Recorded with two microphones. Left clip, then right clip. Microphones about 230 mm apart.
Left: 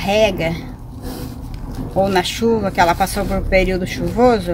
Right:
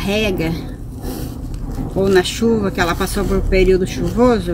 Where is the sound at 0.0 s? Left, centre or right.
Left.